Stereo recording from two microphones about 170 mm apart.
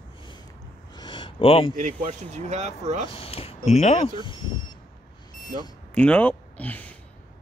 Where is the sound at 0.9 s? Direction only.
25° left (ahead or behind).